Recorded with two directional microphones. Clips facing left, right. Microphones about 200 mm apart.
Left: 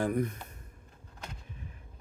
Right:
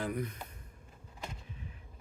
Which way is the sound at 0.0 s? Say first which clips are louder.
Left 6 dB; 50° left (ahead or behind).